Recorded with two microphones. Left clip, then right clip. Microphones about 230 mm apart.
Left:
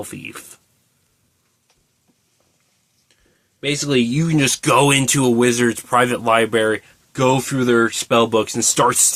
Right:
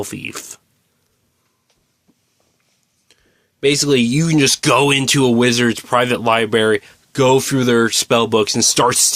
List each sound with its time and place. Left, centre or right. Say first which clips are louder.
0.0 s speech: right 5 dB; right
3.6 s speech: right 5 dB; right